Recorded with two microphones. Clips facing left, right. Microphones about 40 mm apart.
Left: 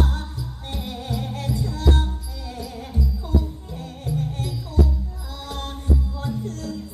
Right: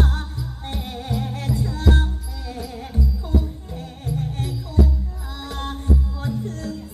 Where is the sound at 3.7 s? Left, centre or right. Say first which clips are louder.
Left 1 dB; right.